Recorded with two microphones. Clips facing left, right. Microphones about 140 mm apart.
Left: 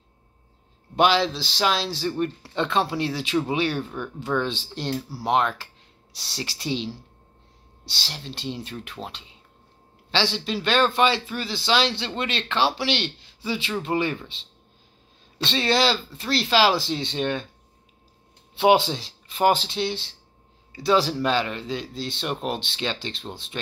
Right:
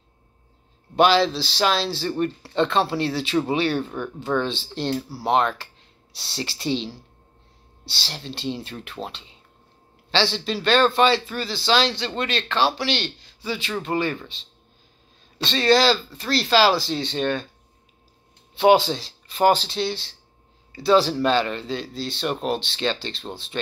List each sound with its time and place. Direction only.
0.9 s speech: 15° left (ahead or behind)
15.6 s speech: 20° left (ahead or behind)
18.6 s speech: 20° left (ahead or behind)